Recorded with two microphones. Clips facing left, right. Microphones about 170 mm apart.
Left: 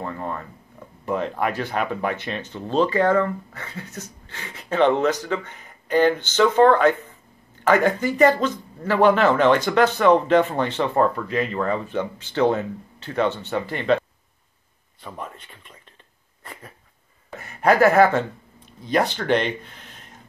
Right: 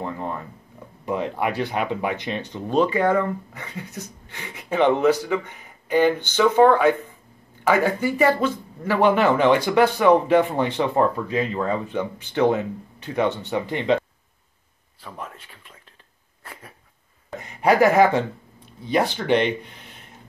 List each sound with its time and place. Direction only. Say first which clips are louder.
0.0 s a sound: right 1 dB; 15° right (ahead or behind)
1.0 s speech: even; 15° right (ahead or behind)
15.0 s speech: left 1 dB; centre (ahead or behind)
17.4 s speech: even; 15° right (ahead or behind)